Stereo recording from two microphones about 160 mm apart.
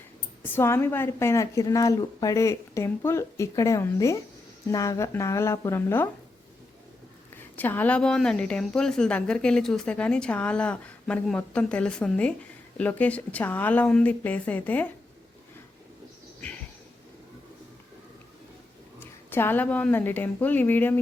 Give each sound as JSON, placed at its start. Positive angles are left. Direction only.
{"t": 0.4, "sound": "a woman's voice", "side_deg": 15}
{"t": 7.5, "sound": "a woman's voice", "side_deg": 10}
{"t": 18.9, "sound": "a woman's voice", "side_deg": 15}